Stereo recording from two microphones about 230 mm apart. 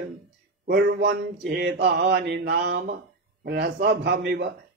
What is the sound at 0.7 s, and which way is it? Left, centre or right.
A man's voice, right.